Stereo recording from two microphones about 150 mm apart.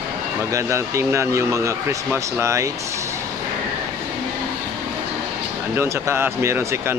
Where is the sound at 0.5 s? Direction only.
20° right (ahead or behind).